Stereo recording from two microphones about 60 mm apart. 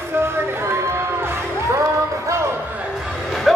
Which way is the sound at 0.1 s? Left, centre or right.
Right.